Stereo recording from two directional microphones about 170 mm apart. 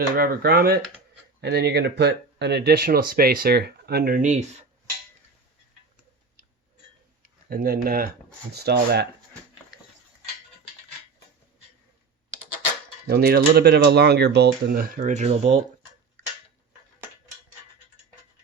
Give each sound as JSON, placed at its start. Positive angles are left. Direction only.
{"t": 0.2, "sound": "speech", "side_deg": -60}
{"t": 1.4, "sound": "speech", "side_deg": -75}
{"t": 7.5, "sound": "speech", "side_deg": -60}
{"t": 8.5, "sound": "speech", "side_deg": -70}
{"t": 13.1, "sound": "speech", "side_deg": -65}